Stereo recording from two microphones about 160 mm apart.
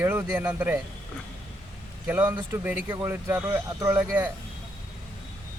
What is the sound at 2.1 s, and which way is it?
Speech, 15° right (ahead or behind).